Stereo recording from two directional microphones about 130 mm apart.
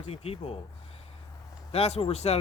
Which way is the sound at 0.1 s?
50° left (ahead or behind).